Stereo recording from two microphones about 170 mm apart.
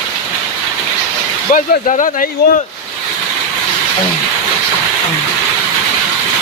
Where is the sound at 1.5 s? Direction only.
50° left (ahead or behind).